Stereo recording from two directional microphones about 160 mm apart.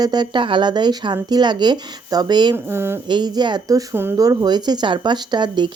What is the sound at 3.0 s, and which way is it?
Speech, 25° right (ahead or behind).